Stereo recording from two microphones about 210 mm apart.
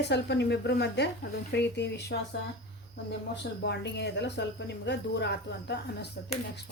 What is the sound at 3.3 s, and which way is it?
Speech, 55° left (ahead or behind).